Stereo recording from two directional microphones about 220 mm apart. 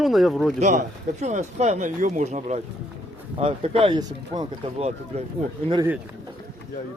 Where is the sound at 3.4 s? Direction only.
25° right (ahead or behind).